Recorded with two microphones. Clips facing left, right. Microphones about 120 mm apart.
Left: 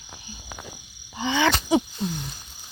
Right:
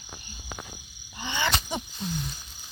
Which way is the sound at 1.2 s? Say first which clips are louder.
Left 8 dB; 90° left.